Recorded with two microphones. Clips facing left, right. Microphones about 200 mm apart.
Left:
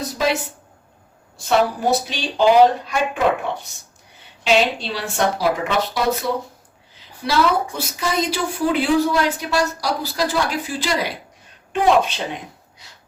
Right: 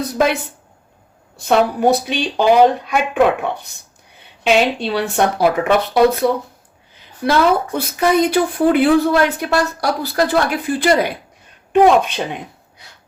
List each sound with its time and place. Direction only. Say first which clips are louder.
0.1 s speech: right 4 dB; 55° right (ahead or behind)
1.5 s speech: right 4 dB; 55° right (ahead or behind)
12.8 s a sound: right 4 dB; 55° right (ahead or behind)